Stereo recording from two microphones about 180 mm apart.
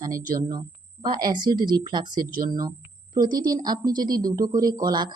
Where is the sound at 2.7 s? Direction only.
25° right (ahead or behind).